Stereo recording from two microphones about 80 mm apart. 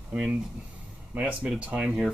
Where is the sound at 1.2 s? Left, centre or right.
Centre.